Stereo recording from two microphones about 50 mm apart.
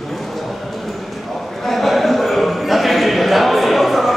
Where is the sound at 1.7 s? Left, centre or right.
Centre.